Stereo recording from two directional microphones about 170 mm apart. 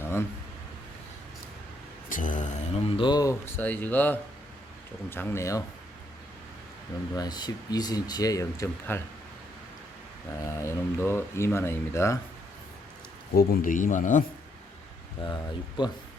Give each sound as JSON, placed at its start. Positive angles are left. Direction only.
{"t": 0.0, "sound": "a sound", "side_deg": 15}
{"t": 2.0, "sound": "speech", "side_deg": 50}
{"t": 7.2, "sound": "speech", "side_deg": 25}
{"t": 10.4, "sound": "speech", "side_deg": 15}
{"t": 13.3, "sound": "speech", "side_deg": 60}
{"t": 15.8, "sound": "speech", "side_deg": 25}